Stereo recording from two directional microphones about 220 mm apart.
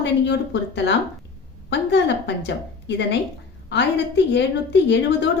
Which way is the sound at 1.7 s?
55° left (ahead or behind).